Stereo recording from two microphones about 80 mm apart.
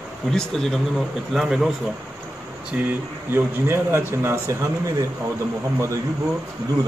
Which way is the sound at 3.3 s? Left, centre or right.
Right.